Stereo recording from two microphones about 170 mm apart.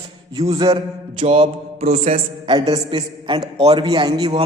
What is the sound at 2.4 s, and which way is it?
A man's voice, 30° right (ahead or behind).